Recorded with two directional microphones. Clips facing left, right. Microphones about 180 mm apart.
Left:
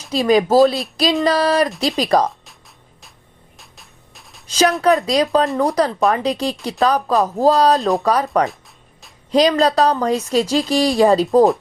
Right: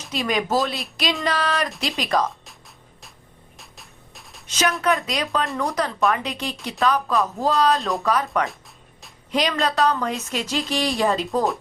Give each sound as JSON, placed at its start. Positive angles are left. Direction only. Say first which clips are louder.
{"t": 0.1, "sound": "a woman's voice", "louder": "left 9 dB", "side_deg": 35}
{"t": 3.6, "sound": "music", "louder": "right 1 dB", "side_deg": 0}
{"t": 4.4, "sound": "a woman's voice", "louder": "left 7 dB", "side_deg": 35}